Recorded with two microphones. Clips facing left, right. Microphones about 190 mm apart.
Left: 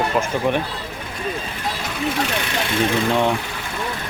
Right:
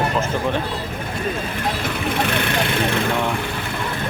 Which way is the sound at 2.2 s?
55° right (ahead or behind).